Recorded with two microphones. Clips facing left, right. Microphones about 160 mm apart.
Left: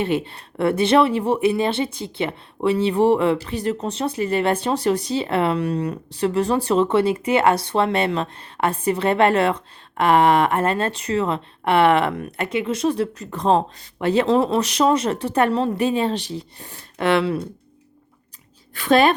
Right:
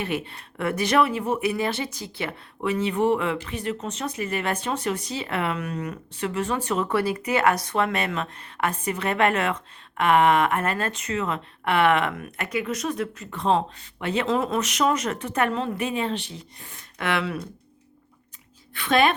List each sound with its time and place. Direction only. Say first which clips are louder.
0.0 s speech: left 6 dB; 30° left (ahead or behind)
18.7 s speech: left 5 dB; 40° left (ahead or behind)